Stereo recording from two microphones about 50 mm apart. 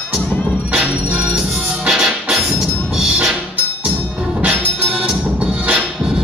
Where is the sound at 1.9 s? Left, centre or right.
Centre.